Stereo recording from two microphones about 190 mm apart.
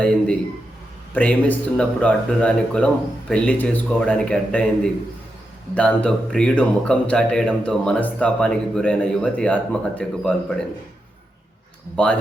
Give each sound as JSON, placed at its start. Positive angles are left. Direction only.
{"t": 1.1, "sound": "a man's voice", "side_deg": 10}
{"t": 12.0, "sound": "a man's voice", "side_deg": 5}